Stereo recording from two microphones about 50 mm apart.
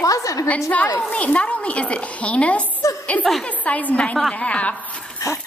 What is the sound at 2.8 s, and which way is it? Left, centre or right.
Chuckle, left.